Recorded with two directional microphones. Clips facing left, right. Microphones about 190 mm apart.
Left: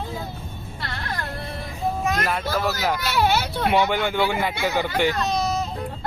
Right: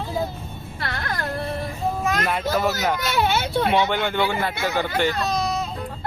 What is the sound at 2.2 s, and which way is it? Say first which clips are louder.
Speech: right 2 dB; centre (ahead or behind).